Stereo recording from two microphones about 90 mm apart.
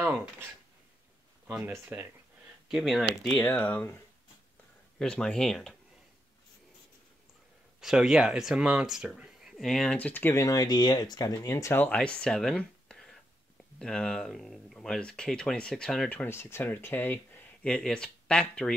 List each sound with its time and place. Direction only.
0.0 s speech: 25° right (ahead or behind)
1.5 s speech: 25° right (ahead or behind)
2.7 s speech: centre (ahead or behind)
3.3 s speech: 20° left (ahead or behind)
4.9 s speech: 10° left (ahead or behind)
7.8 s speech: 5° right (ahead or behind)
9.9 s speech: 20° left (ahead or behind)
10.3 s speech: 40° left (ahead or behind)
11.8 s speech: 10° left (ahead or behind)
16.3 s speech: 25° left (ahead or behind)
17.6 s speech: 10° left (ahead or behind)